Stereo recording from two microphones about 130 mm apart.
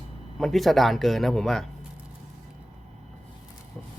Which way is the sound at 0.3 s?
Centre (ahead or behind).